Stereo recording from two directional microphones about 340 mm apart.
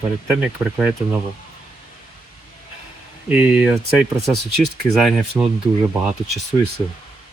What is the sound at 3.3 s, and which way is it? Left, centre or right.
Speech, centre.